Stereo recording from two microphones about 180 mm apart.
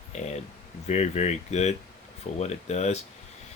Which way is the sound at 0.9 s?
40° left (ahead or behind).